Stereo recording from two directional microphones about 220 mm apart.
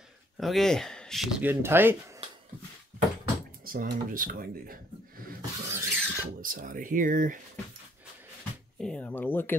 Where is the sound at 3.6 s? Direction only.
40° right (ahead or behind).